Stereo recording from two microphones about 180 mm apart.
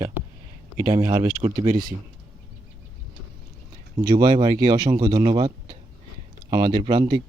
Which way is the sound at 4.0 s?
20° right (ahead or behind).